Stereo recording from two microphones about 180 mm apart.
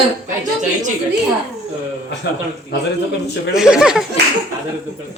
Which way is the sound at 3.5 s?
5° right (ahead or behind).